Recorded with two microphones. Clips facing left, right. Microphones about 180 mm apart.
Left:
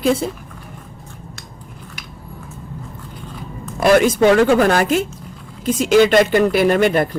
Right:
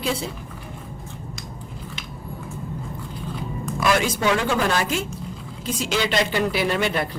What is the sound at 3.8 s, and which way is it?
Speech, 50° left (ahead or behind).